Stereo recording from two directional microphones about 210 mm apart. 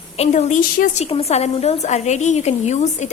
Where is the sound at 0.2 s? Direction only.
35° left (ahead or behind).